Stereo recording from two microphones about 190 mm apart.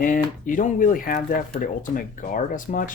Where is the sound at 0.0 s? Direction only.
45° left (ahead or behind).